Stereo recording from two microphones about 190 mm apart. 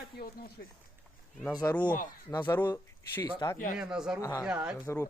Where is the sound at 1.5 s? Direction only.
20° left (ahead or behind).